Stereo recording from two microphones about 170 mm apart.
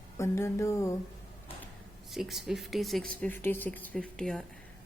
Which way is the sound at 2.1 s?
Centre (ahead or behind).